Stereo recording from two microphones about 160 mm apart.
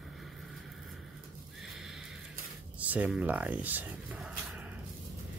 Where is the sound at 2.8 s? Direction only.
10° right (ahead or behind).